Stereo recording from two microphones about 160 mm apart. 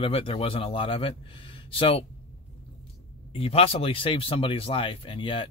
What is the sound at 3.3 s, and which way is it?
A man's voice, 35° left (ahead or behind).